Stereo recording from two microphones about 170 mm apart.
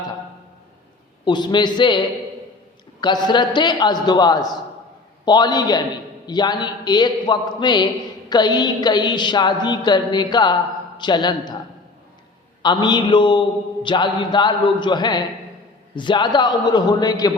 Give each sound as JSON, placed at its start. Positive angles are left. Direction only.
{"t": 1.2, "sound": "a woman's voice", "side_deg": 25}
{"t": 3.0, "sound": "a woman's voice", "side_deg": 25}
{"t": 12.6, "sound": "a woman's voice", "side_deg": 25}